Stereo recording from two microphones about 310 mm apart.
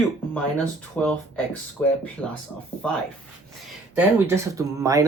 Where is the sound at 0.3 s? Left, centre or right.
Centre.